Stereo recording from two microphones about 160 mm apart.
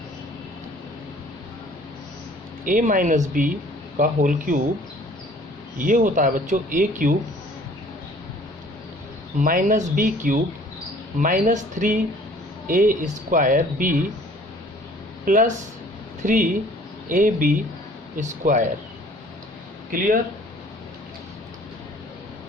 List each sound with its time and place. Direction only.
2.6 s speech: 55° right (ahead or behind)
5.8 s speech: 55° right (ahead or behind)
9.4 s speech: 55° right (ahead or behind)
15.2 s speech: 55° right (ahead or behind)